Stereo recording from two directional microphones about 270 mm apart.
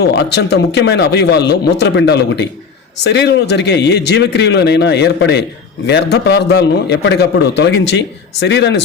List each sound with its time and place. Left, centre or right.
0.0 s a man's voice: left